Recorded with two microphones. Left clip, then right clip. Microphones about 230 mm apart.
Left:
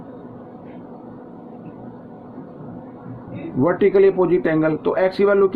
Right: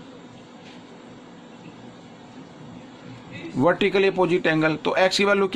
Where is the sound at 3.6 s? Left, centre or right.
Right.